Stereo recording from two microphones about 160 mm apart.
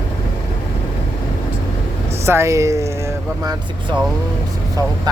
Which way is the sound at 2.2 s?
15° right (ahead or behind).